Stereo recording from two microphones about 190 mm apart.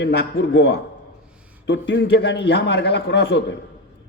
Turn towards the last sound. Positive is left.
turn(degrees=65)  # may be behind; listen again after turning